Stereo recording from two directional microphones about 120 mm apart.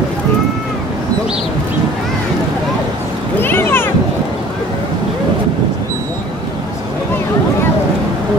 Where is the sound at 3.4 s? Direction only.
20° left (ahead or behind).